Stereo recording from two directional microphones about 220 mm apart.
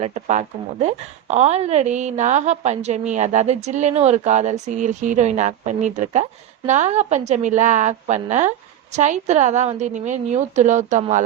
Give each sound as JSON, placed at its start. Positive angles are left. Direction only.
{"t": 0.0, "sound": "a woman's voice", "side_deg": -30}